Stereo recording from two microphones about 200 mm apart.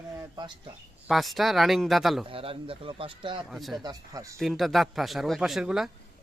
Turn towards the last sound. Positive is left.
turn(degrees=-5)  # may be behind; listen again after turning